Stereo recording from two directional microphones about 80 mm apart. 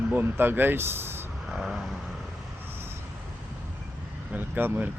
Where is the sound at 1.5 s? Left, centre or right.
Centre.